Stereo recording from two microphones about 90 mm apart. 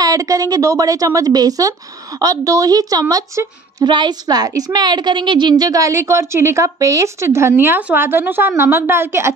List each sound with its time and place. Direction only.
0.0 s speech: 40° right (ahead or behind)
3.8 s a woman's voice: 55° right (ahead or behind); by 9.3 s 30° right (ahead or behind)